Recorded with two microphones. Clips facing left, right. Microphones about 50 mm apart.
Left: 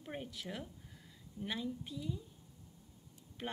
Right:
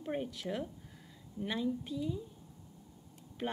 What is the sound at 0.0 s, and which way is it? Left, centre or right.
A woman's voice, centre.